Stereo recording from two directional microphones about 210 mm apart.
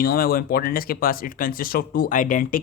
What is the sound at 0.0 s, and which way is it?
Speech, 45° left (ahead or behind).